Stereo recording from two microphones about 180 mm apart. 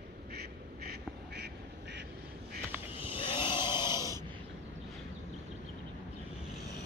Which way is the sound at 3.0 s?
30° left (ahead or behind).